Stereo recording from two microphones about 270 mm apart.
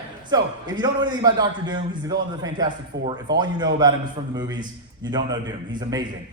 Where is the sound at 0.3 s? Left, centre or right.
Centre.